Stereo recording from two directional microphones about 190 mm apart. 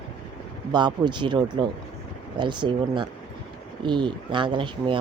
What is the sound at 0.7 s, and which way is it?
Speech, 25° right (ahead or behind).